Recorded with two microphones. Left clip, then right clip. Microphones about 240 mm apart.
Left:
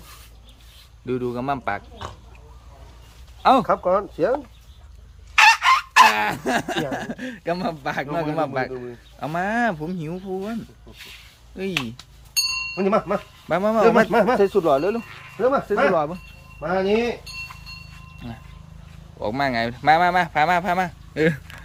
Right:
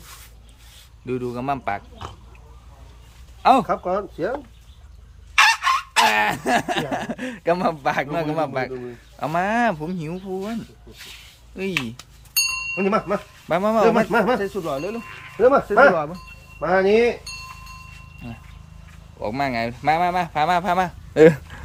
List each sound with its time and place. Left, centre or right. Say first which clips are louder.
1.0 s speech: even; centre
3.4 s speech: right 1 dB; centre
3.7 s speech: left 3 dB; centre
5.3 s chicken: left 2 dB; centre
6.1 s speech: right 1 dB; centre
11.5 s speech: right 1 dB; centre
14.4 s speech: left 8 dB; centre
15.4 s speech: right 5 dB; centre
19.2 s speech: left 1 dB; centre
21.1 s speech: right 11 dB; centre